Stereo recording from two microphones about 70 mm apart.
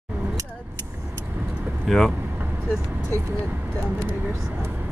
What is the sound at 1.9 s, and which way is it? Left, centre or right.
Speech, centre.